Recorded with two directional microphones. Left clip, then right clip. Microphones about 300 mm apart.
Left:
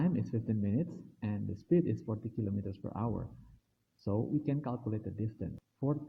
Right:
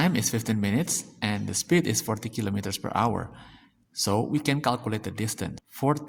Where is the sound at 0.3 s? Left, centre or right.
Right.